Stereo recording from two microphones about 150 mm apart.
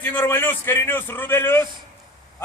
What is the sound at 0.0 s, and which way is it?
A man's voice, 10° left (ahead or behind).